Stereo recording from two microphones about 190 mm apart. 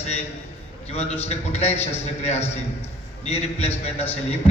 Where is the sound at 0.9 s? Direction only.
35° left (ahead or behind).